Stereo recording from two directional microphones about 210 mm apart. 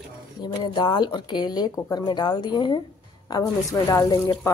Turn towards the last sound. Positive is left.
turn(degrees=20)  # may be behind; listen again after turning